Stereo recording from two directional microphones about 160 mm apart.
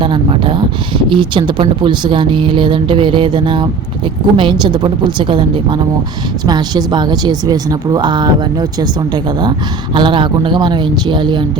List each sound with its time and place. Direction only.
0.0 s a woman's voice: 30° right (ahead or behind)